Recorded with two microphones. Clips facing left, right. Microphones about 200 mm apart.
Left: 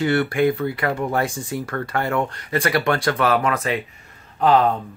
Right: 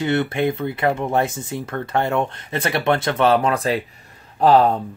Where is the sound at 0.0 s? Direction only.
20° right (ahead or behind).